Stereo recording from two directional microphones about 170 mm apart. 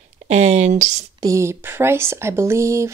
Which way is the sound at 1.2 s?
15° right (ahead or behind).